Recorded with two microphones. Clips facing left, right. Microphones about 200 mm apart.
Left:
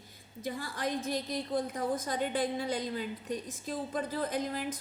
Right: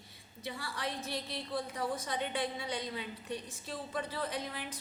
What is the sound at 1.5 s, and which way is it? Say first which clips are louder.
A woman's voice: left 4 dB; 45° left (ahead or behind).